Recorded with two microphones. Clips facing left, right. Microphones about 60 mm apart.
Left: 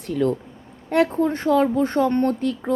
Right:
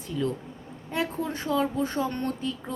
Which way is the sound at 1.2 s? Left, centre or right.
Left.